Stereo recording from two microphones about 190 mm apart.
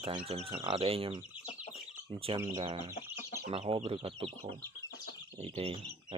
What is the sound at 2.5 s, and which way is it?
Speech, 35° right (ahead or behind).